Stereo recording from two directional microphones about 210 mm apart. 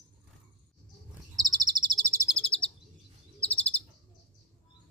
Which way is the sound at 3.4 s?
5° left (ahead or behind).